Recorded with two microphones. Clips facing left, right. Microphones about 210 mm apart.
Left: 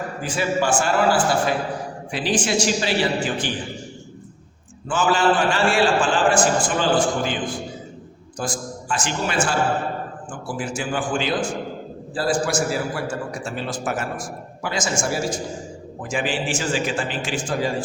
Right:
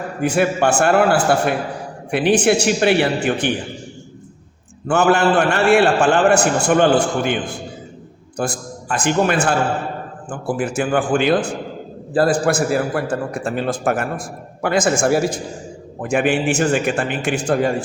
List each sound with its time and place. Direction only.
0.2 s a man's voice: 60° right (ahead or behind)
4.9 s a man's voice: 65° right (ahead or behind)